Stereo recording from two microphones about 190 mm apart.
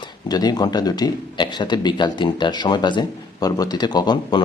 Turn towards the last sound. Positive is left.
turn(degrees=25)  # may be behind; listen again after turning